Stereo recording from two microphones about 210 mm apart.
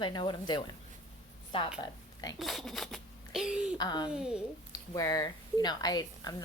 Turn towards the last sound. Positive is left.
turn(degrees=20)  # may be behind; listen again after turning